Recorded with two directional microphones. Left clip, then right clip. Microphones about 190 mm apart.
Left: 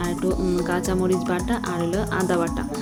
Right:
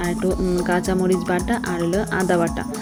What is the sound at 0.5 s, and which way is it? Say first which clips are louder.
Speech: right 3 dB; 15° right (ahead or behind).